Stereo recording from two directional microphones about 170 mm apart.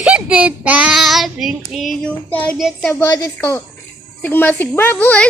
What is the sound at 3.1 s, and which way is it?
A woman's voice, 20° left (ahead or behind).